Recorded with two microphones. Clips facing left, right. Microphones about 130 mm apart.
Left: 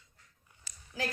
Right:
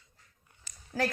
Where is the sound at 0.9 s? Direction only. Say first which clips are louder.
Right 6 dB; 45° right (ahead or behind).